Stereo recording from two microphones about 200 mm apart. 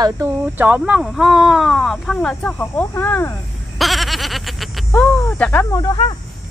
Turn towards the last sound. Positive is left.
turn(degrees=20)  # may be behind; listen again after turning